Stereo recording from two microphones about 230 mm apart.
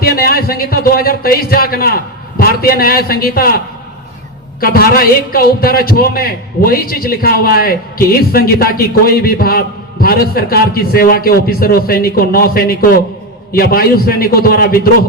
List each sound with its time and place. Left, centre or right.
0.0 s a man's voice: left
4.6 s a man's voice: left